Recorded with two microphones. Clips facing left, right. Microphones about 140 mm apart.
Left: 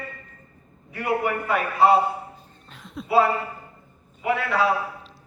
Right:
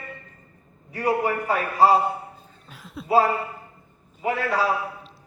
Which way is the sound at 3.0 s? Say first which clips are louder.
Even; 40° right (ahead or behind).